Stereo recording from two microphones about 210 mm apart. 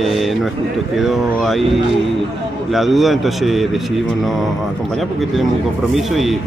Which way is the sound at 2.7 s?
Centre (ahead or behind).